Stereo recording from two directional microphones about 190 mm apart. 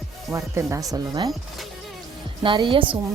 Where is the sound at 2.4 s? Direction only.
25° right (ahead or behind).